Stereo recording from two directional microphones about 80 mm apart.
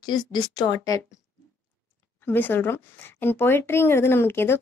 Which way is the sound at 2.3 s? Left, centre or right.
Left.